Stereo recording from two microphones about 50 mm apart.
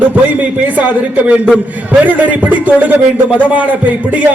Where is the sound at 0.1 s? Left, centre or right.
Right.